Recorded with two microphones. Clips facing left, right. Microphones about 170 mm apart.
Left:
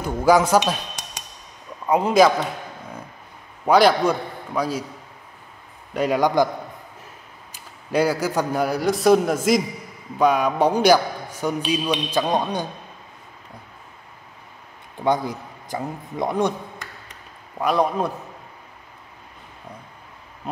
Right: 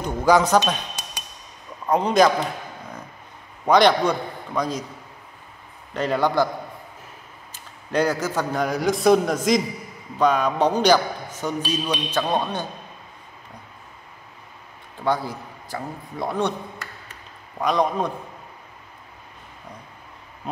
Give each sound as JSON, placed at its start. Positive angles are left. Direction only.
{"t": 0.0, "sound": "a man's voice", "side_deg": 10}
{"t": 1.9, "sound": "a man's voice", "side_deg": 5}
{"t": 3.6, "sound": "a man's voice", "side_deg": 5}
{"t": 5.9, "sound": "a man's voice", "side_deg": 10}
{"t": 7.9, "sound": "a man's voice", "side_deg": 10}
{"t": 15.0, "sound": "a man's voice", "side_deg": 20}
{"t": 17.6, "sound": "a man's voice", "side_deg": 5}